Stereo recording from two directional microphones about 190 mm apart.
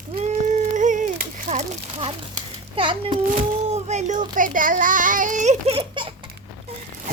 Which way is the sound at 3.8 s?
35° right (ahead or behind).